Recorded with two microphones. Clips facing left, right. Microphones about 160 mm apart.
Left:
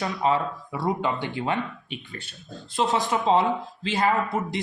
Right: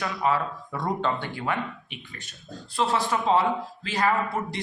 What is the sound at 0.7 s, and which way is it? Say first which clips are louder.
Speech: left 1 dB; 10° left (ahead or behind).